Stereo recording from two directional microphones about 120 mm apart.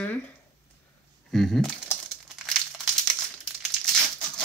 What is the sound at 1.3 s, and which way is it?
Speech, 5° left (ahead or behind).